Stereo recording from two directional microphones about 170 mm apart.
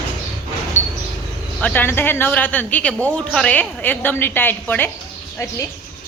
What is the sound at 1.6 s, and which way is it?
A woman's voice, 10° left (ahead or behind).